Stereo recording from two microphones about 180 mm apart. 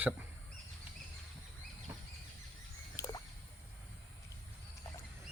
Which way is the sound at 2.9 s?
20° left (ahead or behind).